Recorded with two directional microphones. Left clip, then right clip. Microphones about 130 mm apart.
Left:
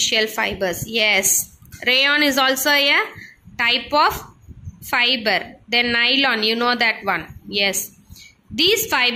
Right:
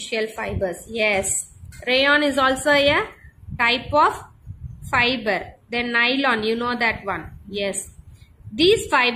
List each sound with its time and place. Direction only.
0.1 s a woman's voice: 25° left (ahead or behind)
8.9 s a woman's voice: 20° left (ahead or behind)